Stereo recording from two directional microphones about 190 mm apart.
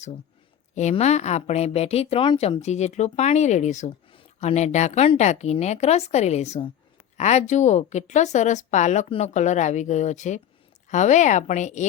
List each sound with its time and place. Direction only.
0.8 s speech: 35° left (ahead or behind)